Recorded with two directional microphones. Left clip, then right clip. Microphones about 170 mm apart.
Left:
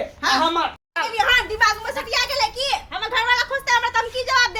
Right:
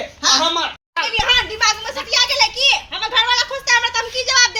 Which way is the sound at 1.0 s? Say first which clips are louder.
Right 2 dB; 15° left (ahead or behind).